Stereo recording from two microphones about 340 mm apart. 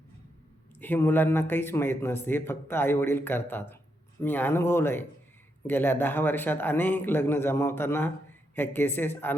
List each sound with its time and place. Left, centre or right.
0.8 s a man's voice: centre